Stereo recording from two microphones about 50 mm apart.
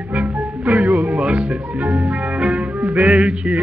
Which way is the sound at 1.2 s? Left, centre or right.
Right.